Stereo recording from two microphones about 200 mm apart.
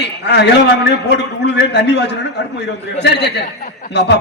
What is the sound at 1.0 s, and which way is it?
A man's voice, 60° left (ahead or behind).